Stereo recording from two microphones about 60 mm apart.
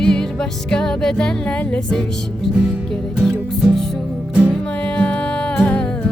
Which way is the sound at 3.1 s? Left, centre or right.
Centre.